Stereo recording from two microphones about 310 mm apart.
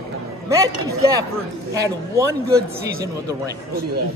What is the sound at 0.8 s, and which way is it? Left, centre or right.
Speech, centre.